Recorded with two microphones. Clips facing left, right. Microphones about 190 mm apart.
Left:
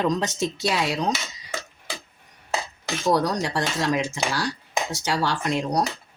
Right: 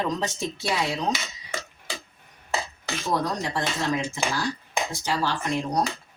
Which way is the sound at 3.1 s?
75° left (ahead or behind).